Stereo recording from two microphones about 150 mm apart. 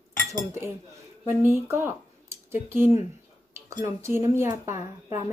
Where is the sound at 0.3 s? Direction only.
15° right (ahead or behind).